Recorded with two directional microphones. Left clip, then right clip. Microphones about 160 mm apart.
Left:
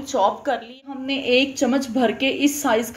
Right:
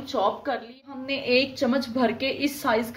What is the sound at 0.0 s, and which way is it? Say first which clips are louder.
A woman's voice: left 5 dB; 10° left (ahead or behind).